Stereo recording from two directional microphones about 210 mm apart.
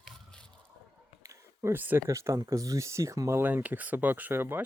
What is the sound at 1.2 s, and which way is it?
Speech, 15° right (ahead or behind).